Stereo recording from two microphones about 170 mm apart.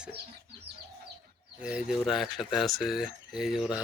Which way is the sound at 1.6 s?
5° right (ahead or behind).